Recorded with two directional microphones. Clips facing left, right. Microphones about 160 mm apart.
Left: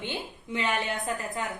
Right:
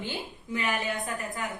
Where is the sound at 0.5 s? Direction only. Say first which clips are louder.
Left 1 dB; 25° left (ahead or behind).